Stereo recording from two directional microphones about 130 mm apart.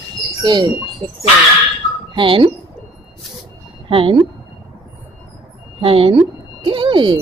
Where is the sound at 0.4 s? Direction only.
30° right (ahead or behind).